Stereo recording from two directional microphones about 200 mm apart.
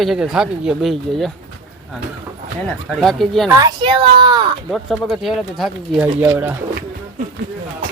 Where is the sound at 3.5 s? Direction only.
20° right (ahead or behind).